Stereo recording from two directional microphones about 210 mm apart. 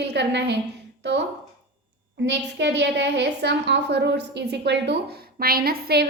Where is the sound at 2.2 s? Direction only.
55° right (ahead or behind).